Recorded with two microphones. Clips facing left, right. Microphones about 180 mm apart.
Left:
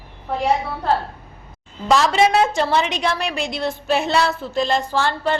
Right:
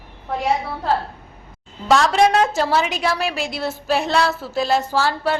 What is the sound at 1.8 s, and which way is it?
A woman's voice, centre (ahead or behind).